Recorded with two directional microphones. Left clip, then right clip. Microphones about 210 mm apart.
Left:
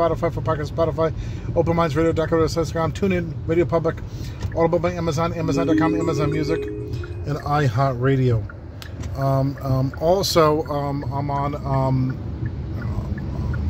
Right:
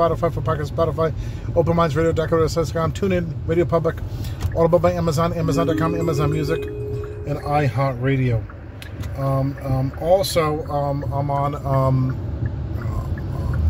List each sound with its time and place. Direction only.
0.0 s speech: 10° left (ahead or behind)
7.2 s a man's voice: 30° left (ahead or behind)
11.1 s speech: 10° left (ahead or behind)